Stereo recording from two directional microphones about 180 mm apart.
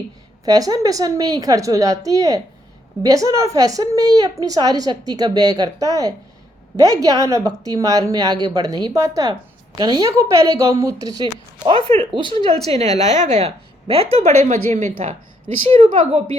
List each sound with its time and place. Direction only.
0.4 s a woman's voice: 20° right (ahead or behind); by 15.6 s 35° right (ahead or behind)